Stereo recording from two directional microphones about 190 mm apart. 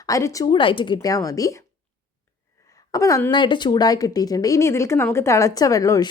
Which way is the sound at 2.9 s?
20° left (ahead or behind).